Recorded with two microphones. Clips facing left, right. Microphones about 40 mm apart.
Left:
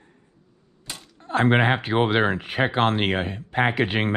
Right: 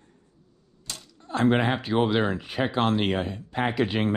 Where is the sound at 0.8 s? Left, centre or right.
Left.